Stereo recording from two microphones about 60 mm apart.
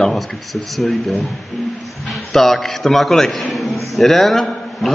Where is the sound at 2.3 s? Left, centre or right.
Centre.